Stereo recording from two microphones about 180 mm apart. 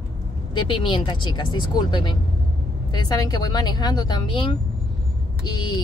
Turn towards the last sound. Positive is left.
turn(degrees=25)  # may be behind; listen again after turning